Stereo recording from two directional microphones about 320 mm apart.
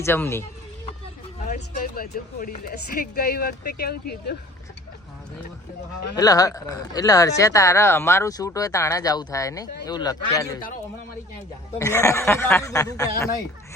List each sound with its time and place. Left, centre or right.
0.0 s speech: centre
1.5 s speech: left
6.1 s speech: centre
11.8 s speech: centre